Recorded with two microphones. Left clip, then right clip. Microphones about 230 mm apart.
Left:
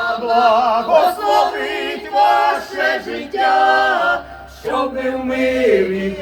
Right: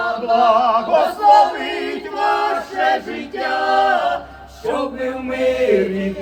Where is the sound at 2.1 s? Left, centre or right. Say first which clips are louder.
Left 5 dB; left.